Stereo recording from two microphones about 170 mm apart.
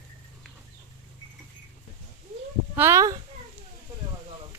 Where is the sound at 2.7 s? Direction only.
15° right (ahead or behind).